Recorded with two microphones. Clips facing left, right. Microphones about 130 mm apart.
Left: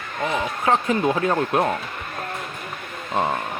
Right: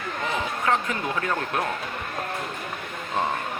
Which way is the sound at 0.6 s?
25° left (ahead or behind).